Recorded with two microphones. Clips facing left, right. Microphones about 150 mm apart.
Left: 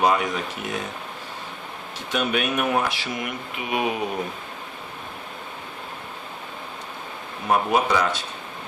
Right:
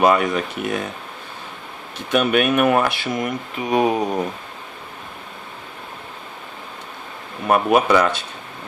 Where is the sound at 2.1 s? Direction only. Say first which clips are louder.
Right 7 dB; 60° right (ahead or behind); by 4.0 s 40° right (ahead or behind).